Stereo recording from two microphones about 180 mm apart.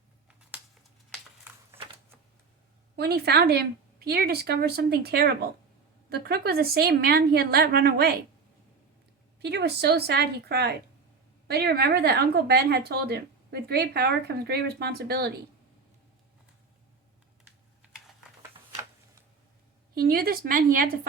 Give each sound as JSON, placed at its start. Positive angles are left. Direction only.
{"t": 2.9, "sound": "a woman's voice", "side_deg": -60}
{"t": 9.4, "sound": "a woman's voice", "side_deg": -65}
{"t": 20.0, "sound": "speech", "side_deg": -55}